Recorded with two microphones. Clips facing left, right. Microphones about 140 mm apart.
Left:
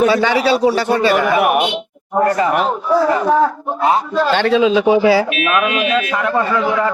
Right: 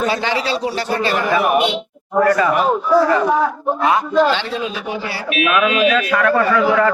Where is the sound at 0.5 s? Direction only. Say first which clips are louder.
Left 6 dB; 60° left (ahead or behind).